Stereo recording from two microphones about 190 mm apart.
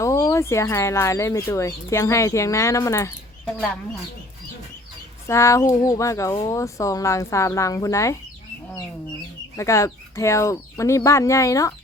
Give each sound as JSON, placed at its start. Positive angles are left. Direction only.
{"t": 0.0, "sound": "speech", "side_deg": 15}
{"t": 5.3, "sound": "speech", "side_deg": 15}
{"t": 9.6, "sound": "speech", "side_deg": 15}